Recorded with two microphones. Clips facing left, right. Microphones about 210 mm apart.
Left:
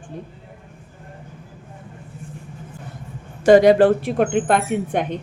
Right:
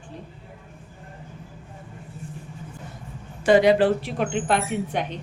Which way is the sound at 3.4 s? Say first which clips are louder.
Left 5 dB; 45° left (ahead or behind).